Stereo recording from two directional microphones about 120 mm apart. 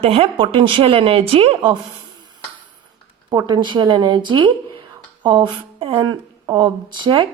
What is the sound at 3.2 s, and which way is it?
Speech, 35° right (ahead or behind).